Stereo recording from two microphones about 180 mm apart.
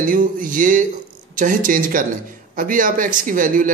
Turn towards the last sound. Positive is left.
turn(degrees=-50)  # may be behind; listen again after turning